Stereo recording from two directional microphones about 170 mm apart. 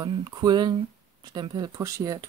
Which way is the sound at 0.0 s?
25° right (ahead or behind).